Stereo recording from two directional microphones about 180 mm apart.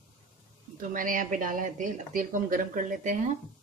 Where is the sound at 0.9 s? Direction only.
50° right (ahead or behind).